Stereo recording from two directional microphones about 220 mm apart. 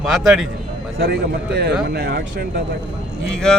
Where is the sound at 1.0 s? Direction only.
45° right (ahead or behind).